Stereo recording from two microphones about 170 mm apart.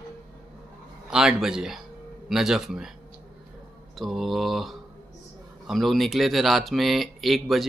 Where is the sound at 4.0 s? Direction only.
Centre (ahead or behind).